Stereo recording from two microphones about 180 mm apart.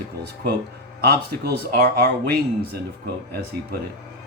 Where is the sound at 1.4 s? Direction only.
60° right (ahead or behind).